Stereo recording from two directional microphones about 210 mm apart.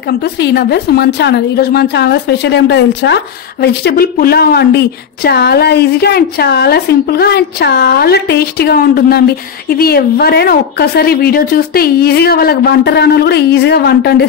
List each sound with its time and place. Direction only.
0.4 s a woman's voice: 50° left (ahead or behind)